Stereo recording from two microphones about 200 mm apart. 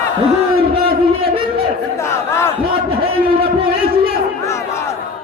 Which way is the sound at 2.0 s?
15° left (ahead or behind).